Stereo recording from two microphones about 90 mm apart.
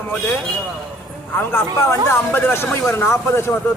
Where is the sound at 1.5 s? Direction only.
25° left (ahead or behind).